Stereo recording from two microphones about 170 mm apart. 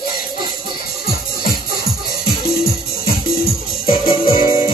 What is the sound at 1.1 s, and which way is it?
Music, 60° left (ahead or behind).